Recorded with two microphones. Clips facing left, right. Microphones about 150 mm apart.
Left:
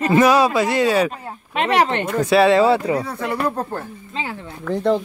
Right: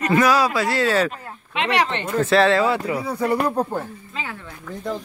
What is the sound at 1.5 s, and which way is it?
Speech, 45° left (ahead or behind).